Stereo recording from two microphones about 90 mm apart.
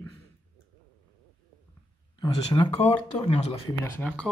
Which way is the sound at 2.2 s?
55° left (ahead or behind).